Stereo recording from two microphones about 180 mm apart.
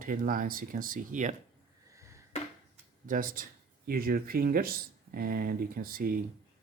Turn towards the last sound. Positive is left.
turn(degrees=-55)  # may be behind; listen again after turning